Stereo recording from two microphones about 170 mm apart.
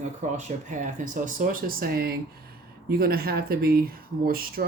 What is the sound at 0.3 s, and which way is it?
Speech, 45° right (ahead or behind).